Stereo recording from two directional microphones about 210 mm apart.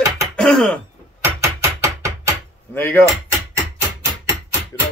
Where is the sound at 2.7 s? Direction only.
10° left (ahead or behind).